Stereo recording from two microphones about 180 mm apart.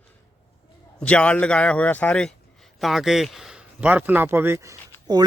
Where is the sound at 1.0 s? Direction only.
5° left (ahead or behind).